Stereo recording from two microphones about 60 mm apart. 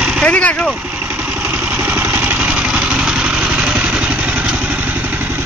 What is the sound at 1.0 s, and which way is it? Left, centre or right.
Vehicle, right.